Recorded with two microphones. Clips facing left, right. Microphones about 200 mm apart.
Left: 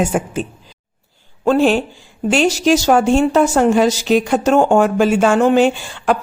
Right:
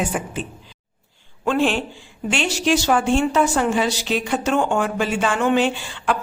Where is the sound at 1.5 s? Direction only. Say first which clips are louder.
Left 6 dB; 40° left (ahead or behind).